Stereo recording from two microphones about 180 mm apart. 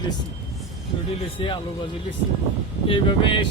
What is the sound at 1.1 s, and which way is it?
Speech, 30° left (ahead or behind).